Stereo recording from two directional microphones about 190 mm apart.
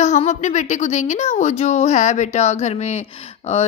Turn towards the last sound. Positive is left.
turn(degrees=35)  # may be behind; listen again after turning